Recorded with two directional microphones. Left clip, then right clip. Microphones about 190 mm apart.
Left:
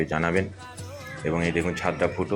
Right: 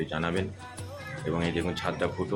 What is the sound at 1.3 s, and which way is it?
Speech, 10° left (ahead or behind).